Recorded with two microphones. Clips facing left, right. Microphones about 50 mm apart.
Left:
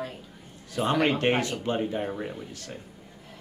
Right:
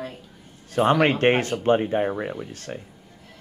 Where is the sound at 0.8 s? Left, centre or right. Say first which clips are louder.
Right 6 dB; right.